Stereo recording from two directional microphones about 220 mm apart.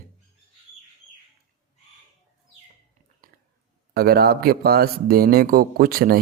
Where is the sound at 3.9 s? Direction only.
45° right (ahead or behind).